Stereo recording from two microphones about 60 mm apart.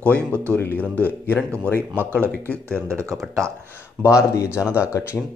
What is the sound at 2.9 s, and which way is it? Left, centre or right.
Speech, right.